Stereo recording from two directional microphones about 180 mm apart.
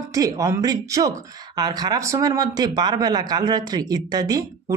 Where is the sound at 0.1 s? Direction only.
20° right (ahead or behind).